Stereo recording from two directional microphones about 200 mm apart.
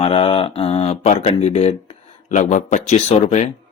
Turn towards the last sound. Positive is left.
turn(degrees=35)  # may be behind; listen again after turning